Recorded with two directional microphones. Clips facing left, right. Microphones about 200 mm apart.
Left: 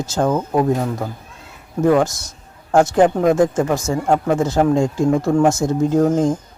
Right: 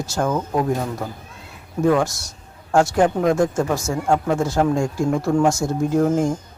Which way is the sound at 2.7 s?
20° left (ahead or behind).